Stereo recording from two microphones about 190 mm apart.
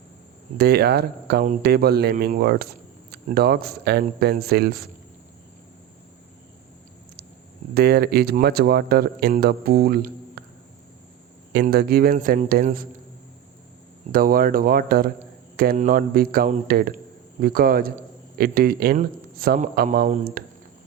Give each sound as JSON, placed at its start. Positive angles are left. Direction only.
{"t": 0.5, "sound": "speech", "side_deg": -55}
{"t": 7.7, "sound": "speech", "side_deg": -55}
{"t": 11.7, "sound": "speech", "side_deg": -55}
{"t": 14.1, "sound": "a man's voice", "side_deg": -50}